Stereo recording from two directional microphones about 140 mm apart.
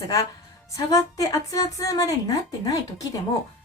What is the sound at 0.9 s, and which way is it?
A woman's voice, 25° left (ahead or behind).